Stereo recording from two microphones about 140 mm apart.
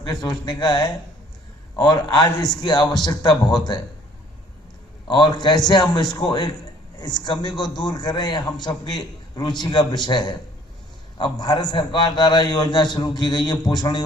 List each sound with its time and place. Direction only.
0.0 s a man's voice: 30° left (ahead or behind)
5.0 s a man's voice: 35° left (ahead or behind)